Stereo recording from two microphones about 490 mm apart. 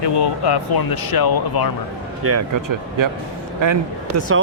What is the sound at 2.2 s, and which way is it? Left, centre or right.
Speech, right.